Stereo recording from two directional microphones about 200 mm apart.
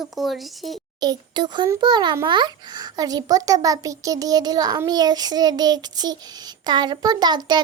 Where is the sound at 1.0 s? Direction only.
20° right (ahead or behind).